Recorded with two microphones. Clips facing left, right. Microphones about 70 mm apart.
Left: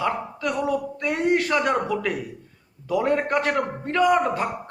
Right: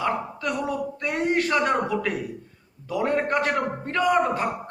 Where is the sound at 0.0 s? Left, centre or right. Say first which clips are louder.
Left 1 dB; centre.